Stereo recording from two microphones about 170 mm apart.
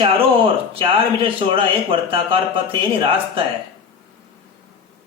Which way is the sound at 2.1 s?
30° right (ahead or behind).